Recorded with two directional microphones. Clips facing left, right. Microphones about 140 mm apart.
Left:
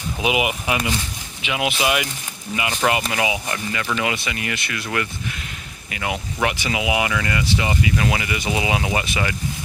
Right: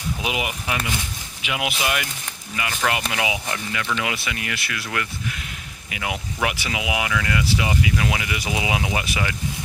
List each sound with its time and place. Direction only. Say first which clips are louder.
0.2 s speech: left 9 dB; 5° left (ahead or behind)
1.5 s speech: left 3 dB; 5° right (ahead or behind)
1.8 s speech: left 4 dB; 10° left (ahead or behind)